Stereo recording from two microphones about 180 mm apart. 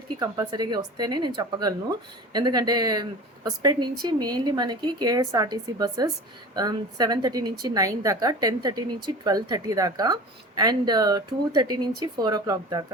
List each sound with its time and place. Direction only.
0.2 s a woman's voice: 20° right (ahead or behind)